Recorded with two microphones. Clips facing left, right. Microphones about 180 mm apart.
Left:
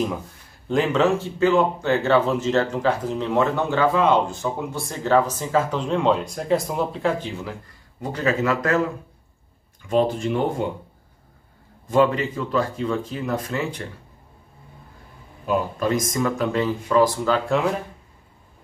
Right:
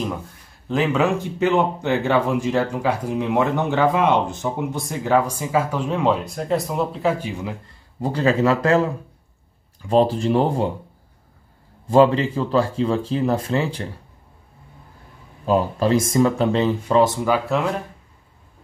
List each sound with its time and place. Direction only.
0.7 s speech: 5° right (ahead or behind)
8.0 s speech: 30° right (ahead or behind)
11.9 s speech: 30° right (ahead or behind)
15.4 s speech: 30° right (ahead or behind)
17.3 s speech: centre (ahead or behind)